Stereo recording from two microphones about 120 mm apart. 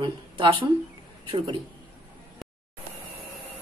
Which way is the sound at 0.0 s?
45° right (ahead or behind).